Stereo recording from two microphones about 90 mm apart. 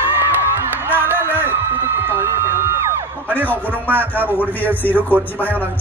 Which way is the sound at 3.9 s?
20° right (ahead or behind).